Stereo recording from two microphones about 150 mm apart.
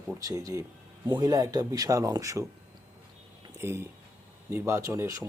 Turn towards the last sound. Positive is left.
turn(degrees=-20)  # may be behind; listen again after turning